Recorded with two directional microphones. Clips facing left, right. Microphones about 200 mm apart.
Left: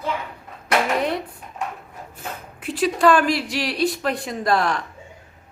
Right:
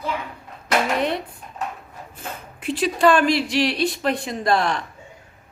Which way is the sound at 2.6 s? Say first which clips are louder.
Even; centre (ahead or behind).